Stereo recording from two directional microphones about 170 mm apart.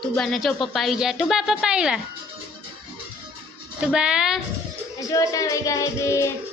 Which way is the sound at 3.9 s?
5° right (ahead or behind).